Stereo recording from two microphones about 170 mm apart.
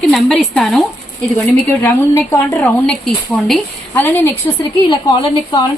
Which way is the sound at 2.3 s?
10° left (ahead or behind).